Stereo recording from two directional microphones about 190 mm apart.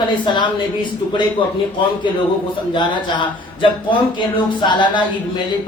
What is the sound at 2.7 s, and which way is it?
A man's voice, 25° left (ahead or behind).